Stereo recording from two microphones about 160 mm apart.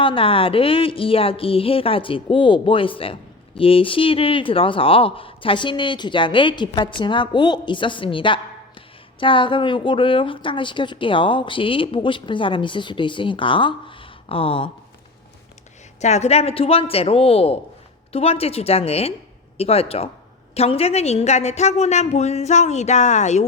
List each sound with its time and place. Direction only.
0.0 s a woman's voice: 35° left (ahead or behind)
16.0 s a woman's voice: 45° left (ahead or behind)